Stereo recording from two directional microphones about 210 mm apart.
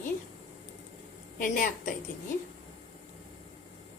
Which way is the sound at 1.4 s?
40° left (ahead or behind).